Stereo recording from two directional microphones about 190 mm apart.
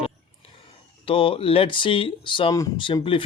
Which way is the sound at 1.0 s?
30° left (ahead or behind).